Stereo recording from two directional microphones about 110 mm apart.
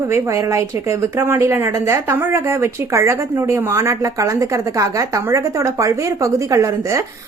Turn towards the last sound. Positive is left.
turn(degrees=-30)  # may be behind; listen again after turning